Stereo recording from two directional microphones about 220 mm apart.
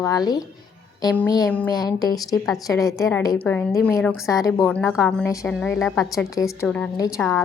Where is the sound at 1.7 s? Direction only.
15° left (ahead or behind).